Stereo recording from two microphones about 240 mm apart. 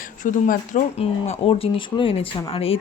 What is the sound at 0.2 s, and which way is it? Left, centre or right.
Speech, left.